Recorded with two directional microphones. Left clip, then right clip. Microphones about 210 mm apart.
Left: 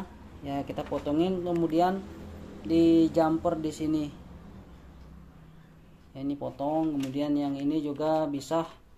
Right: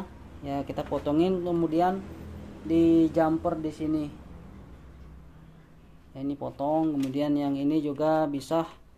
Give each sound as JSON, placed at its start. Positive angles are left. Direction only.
{"t": 0.4, "sound": "speech", "side_deg": -10}
{"t": 6.1, "sound": "speech", "side_deg": -10}